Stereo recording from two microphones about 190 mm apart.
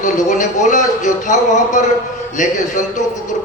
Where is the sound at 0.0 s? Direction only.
40° left (ahead or behind).